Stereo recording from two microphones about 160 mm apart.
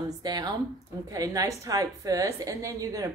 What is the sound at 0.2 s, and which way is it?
A woman's voice, 25° right (ahead or behind).